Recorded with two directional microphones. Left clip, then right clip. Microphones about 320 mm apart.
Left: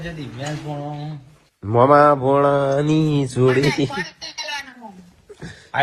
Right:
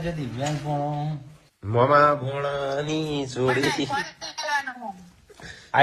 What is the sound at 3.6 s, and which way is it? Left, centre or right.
Speech, centre.